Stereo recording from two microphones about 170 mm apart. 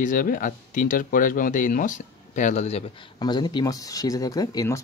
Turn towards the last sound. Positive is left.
turn(degrees=20)  # may be behind; listen again after turning